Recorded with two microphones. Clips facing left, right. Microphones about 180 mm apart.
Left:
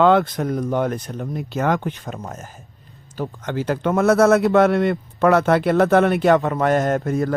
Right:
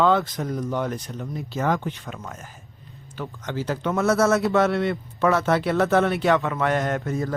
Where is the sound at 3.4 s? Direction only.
55° left (ahead or behind).